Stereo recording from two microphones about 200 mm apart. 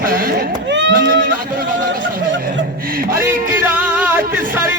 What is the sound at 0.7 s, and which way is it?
Speech, 65° right (ahead or behind).